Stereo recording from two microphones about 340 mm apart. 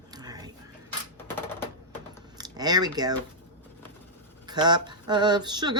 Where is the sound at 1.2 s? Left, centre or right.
Centre.